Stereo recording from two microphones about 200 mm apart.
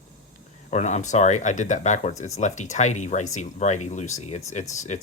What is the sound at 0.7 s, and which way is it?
Speech, 35° left (ahead or behind).